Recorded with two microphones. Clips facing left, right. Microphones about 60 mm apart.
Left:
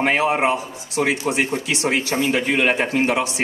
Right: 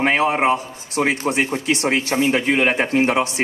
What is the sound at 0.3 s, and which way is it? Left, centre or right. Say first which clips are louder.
A man's voice: right 1 dB; right.